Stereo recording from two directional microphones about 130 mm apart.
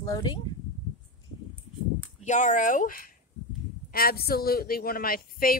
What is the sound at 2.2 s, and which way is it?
Speech, 70° left (ahead or behind).